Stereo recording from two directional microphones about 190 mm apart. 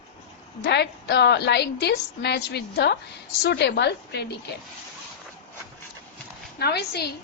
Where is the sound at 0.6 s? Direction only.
60° left (ahead or behind).